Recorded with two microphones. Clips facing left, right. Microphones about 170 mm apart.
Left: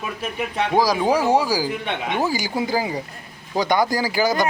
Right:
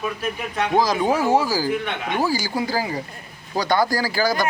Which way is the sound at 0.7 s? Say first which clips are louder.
Left 1 dB; 10° left (ahead or behind).